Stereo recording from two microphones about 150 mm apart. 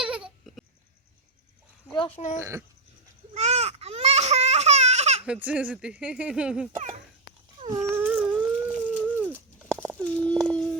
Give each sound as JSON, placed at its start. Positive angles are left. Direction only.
{"t": 0.0, "sound": "a sound", "side_deg": -10}
{"t": 2.1, "sound": "speech", "side_deg": 55}
{"t": 2.4, "sound": "speech", "side_deg": -15}
{"t": 3.3, "sound": "baby cry", "side_deg": -45}
{"t": 5.2, "sound": "speech", "side_deg": -10}
{"t": 6.7, "sound": "dog", "side_deg": -50}
{"t": 7.9, "sound": "howl", "side_deg": -15}
{"t": 9.2, "sound": "a sound", "side_deg": -15}
{"t": 10.0, "sound": "a sound", "side_deg": 10}